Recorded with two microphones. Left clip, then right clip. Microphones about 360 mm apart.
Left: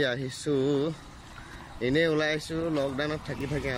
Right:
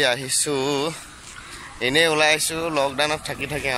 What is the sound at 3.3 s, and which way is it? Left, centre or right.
Speech, right.